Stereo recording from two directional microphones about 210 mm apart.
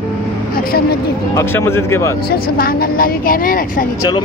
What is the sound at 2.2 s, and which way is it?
A woman's voice, 45° left (ahead or behind).